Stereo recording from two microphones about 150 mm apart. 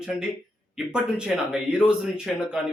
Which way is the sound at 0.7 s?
5° right (ahead or behind).